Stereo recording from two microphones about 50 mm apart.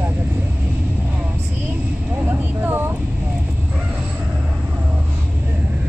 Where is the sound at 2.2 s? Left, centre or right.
Right.